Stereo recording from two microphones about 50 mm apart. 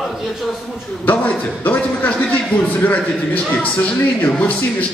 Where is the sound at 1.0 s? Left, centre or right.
Left.